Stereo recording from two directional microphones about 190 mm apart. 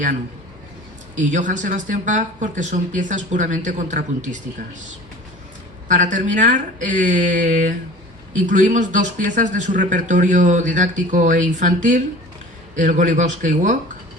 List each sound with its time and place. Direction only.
1.1 s a man's voice: 40° right (ahead or behind)
5.9 s a man's voice: 40° right (ahead or behind)